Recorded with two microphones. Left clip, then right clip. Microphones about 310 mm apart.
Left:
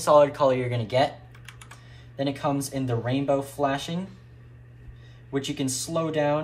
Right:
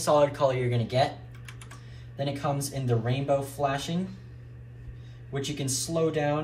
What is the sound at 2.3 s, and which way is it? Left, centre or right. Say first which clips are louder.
Speech: left 3 dB; centre.